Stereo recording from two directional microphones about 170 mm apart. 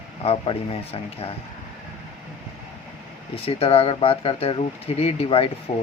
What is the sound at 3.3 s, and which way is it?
Speech, 35° left (ahead or behind).